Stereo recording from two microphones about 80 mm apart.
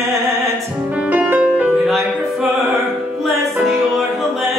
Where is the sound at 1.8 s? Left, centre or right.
Centre.